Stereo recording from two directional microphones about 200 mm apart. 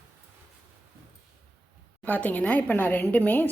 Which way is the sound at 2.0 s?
10° left (ahead or behind).